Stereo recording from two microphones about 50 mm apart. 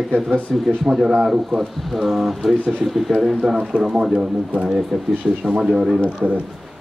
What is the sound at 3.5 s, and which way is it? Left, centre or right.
Speech, centre.